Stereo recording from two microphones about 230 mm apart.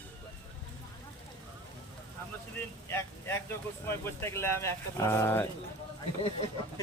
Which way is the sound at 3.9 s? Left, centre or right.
Centre.